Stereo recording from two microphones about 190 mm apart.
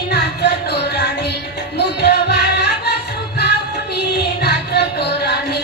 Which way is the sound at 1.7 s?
60° left (ahead or behind).